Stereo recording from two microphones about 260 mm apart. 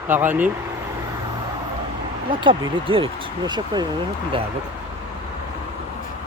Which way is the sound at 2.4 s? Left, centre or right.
Centre.